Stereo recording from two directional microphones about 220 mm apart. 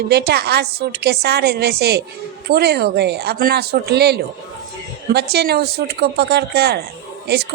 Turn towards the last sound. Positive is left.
turn(degrees=-45)  # may be behind; listen again after turning